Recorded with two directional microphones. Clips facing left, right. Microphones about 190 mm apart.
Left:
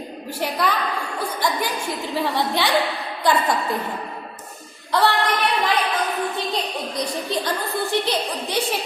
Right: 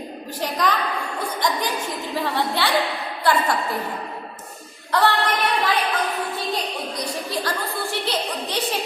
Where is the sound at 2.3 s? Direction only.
15° left (ahead or behind).